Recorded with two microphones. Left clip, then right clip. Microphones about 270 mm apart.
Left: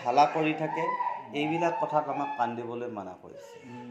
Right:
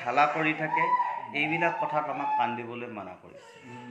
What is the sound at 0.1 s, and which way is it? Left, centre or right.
A man's voice, left.